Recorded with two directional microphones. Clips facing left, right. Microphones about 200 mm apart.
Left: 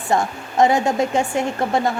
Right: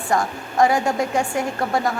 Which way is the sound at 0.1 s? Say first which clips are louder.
Left 2 dB; 25° left (ahead or behind).